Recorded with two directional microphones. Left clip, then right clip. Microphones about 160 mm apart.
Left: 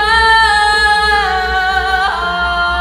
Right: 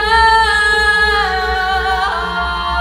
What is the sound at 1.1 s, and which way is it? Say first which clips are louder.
Music: left 2 dB; 15° left (ahead or behind).